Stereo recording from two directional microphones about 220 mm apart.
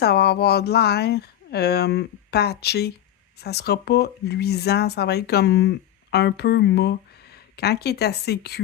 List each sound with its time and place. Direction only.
0.0 s speech: 45° left (ahead or behind)